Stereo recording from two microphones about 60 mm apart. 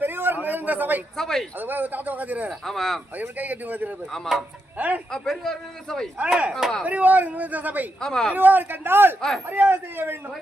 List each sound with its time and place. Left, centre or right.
0.0 s a sound: right
1.1 s speech: centre
1.5 s speech: right
2.6 s a man's voice: centre
3.2 s speech: right
4.1 s a man's voice: centre
6.1 s speech: right
6.5 s a man's voice: centre
6.8 s speech: right
8.0 s speech: centre
8.3 s speech: right